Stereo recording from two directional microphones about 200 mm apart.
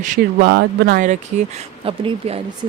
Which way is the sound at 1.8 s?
25° right (ahead or behind).